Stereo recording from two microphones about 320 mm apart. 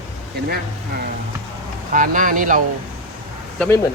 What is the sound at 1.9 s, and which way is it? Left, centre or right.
Speech, right.